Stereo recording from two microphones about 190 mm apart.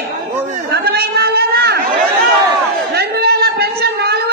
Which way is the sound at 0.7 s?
55° right (ahead or behind).